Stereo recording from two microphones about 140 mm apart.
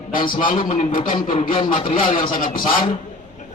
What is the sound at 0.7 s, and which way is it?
Speech, 60° left (ahead or behind).